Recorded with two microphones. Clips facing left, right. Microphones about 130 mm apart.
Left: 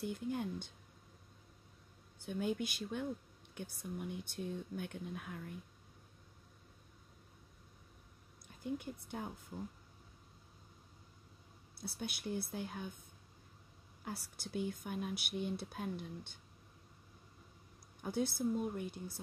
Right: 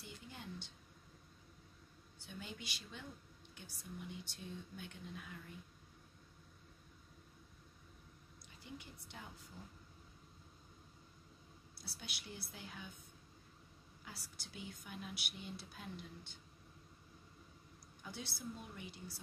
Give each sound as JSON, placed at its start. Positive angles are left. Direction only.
{"t": 0.0, "sound": "a woman's voice", "side_deg": 50}
{"t": 2.2, "sound": "a woman's voice", "side_deg": 50}
{"t": 8.5, "sound": "a woman's voice", "side_deg": 50}
{"t": 11.8, "sound": "a woman's voice", "side_deg": 55}
{"t": 14.0, "sound": "a woman's voice", "side_deg": 50}
{"t": 18.0, "sound": "a woman's voice", "side_deg": 50}